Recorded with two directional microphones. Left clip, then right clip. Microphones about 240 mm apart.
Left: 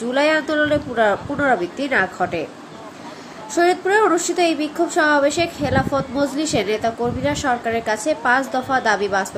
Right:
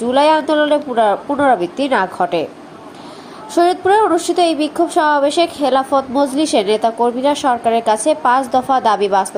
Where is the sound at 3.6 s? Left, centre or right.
Centre.